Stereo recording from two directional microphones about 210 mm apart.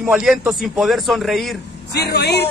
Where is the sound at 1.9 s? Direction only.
50° left (ahead or behind).